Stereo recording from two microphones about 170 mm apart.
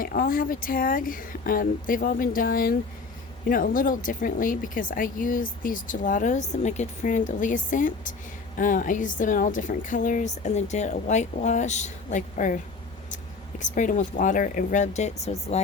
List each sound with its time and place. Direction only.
0.0 s speech: 60° left (ahead or behind)
13.6 s speech: 50° left (ahead or behind)